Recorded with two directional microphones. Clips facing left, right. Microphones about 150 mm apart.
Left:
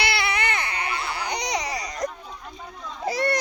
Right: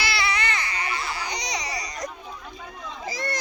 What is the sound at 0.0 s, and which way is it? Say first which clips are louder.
Baby cry: left 2 dB; 55° left (ahead or behind).